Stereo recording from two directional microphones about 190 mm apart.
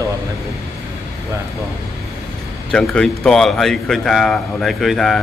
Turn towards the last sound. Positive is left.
turn(degrees=0)  # may be behind; listen again after turning